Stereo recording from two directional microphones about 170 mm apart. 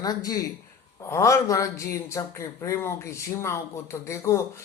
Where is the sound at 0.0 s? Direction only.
20° left (ahead or behind).